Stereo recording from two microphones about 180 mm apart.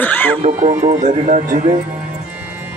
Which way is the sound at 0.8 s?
40° right (ahead or behind).